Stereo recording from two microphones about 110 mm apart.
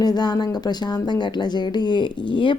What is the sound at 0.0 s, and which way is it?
Speech, 40° left (ahead or behind).